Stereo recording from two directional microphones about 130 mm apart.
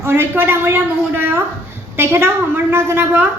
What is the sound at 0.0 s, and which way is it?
A woman's voice, 15° right (ahead or behind).